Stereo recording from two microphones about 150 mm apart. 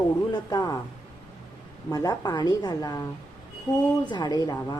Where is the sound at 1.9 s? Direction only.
25° left (ahead or behind).